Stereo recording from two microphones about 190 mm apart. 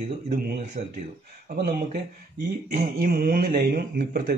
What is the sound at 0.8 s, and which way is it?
Speech, 35° right (ahead or behind).